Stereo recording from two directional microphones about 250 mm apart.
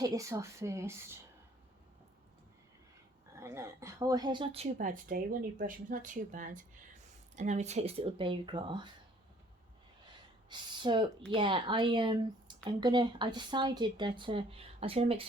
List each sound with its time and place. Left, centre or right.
0.0 s a woman's voice: centre
3.3 s speech: centre
10.5 s a woman's voice: centre